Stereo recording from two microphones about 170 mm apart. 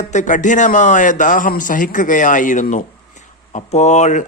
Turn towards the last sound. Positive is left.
turn(degrees=45)  # may be behind; listen again after turning